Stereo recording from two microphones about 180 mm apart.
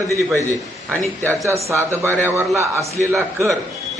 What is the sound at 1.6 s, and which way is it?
A man's voice, 15° right (ahead or behind).